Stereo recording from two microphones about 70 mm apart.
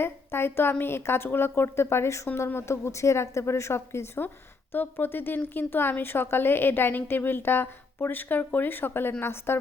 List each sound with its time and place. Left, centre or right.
0.0 s speech: left